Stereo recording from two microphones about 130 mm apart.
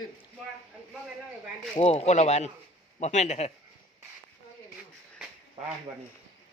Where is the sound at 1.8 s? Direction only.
60° left (ahead or behind).